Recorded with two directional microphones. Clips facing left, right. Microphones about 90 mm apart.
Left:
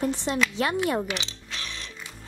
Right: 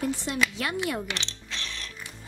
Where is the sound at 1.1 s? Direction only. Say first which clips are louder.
Left 2 dB; 10° left (ahead or behind).